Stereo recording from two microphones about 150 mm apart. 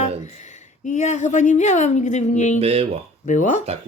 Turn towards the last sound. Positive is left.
turn(degrees=55)  # may be behind; listen again after turning